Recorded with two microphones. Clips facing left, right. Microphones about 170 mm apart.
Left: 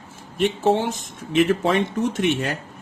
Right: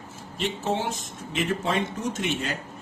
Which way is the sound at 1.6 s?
65° left (ahead or behind).